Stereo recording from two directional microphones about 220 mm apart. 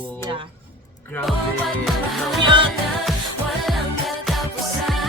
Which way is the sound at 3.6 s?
Centre (ahead or behind).